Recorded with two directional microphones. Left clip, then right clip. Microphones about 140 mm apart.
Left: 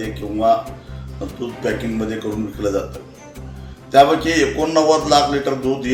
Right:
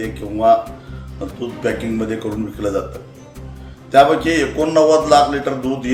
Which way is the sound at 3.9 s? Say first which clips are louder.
Right 1 dB; 10° right (ahead or behind).